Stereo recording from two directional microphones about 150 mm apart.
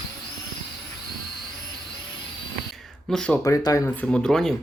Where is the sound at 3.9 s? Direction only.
5° left (ahead or behind).